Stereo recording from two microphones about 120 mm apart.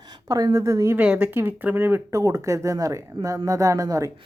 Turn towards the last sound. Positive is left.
turn(degrees=-30)  # may be behind; listen again after turning